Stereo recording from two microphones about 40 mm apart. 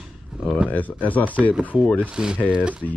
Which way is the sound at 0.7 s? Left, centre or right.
Left.